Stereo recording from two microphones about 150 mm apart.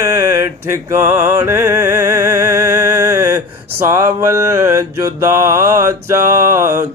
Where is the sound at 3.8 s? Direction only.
20° right (ahead or behind).